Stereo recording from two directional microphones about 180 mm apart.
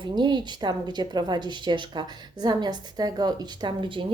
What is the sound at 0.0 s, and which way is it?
A woman's voice, 25° right (ahead or behind).